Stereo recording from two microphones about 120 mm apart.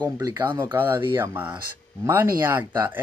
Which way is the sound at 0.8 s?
20° right (ahead or behind).